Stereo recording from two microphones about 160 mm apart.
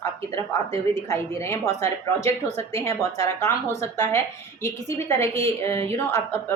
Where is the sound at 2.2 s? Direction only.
40° right (ahead or behind).